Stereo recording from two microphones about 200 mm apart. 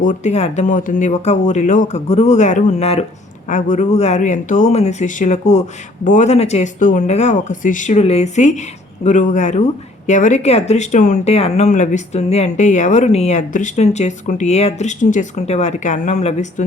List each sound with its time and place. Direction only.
0.0 s speech: 40° left (ahead or behind)